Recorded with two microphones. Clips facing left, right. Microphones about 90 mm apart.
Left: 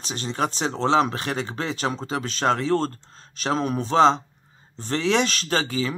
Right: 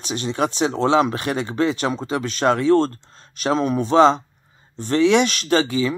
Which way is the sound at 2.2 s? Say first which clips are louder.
Right 4 dB; 35° left (ahead or behind).